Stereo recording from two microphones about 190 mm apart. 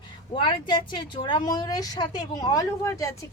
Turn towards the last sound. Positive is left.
turn(degrees=15)  # may be behind; listen again after turning